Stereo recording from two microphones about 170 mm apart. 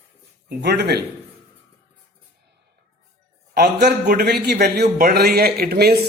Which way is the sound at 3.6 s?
75° right (ahead or behind).